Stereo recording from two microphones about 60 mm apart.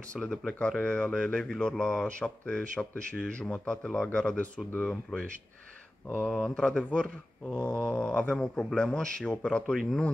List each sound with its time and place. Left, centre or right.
0.1 s speech: centre